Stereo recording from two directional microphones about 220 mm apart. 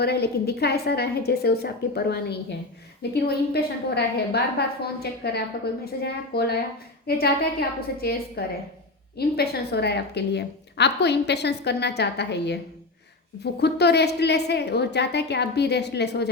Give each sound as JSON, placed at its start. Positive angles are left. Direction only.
{"t": 0.0, "sound": "a woman's voice", "side_deg": 45}